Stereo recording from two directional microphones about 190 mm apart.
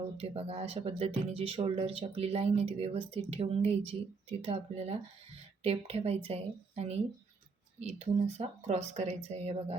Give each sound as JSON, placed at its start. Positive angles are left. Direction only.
{"t": 0.2, "sound": "speech", "side_deg": -30}